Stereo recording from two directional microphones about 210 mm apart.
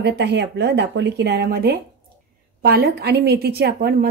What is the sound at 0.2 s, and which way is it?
A woman's voice, 55° right (ahead or behind).